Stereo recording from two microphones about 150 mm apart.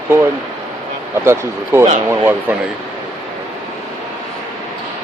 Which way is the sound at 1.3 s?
15° right (ahead or behind).